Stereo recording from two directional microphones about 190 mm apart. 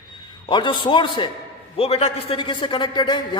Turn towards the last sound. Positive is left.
turn(degrees=25)  # may be behind; listen again after turning